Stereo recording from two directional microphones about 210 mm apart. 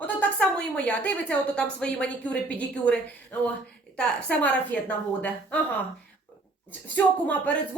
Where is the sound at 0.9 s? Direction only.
5° left (ahead or behind).